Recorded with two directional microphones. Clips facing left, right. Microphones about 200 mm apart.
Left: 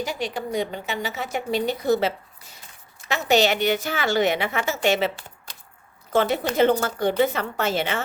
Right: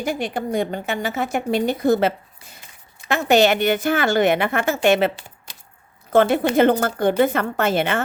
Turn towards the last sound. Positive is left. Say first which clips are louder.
# right 4 dB
turn(degrees=-55)  # may be behind; listen again after turning